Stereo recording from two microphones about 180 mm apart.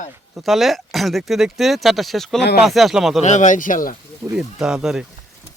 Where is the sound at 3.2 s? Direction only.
40° left (ahead or behind).